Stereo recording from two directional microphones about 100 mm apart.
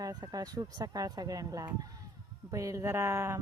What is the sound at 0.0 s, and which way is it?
Speech, 40° right (ahead or behind).